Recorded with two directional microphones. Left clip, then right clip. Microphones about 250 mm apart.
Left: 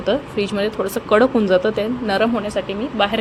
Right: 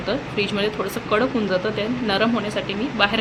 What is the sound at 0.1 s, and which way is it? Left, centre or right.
Speech, left.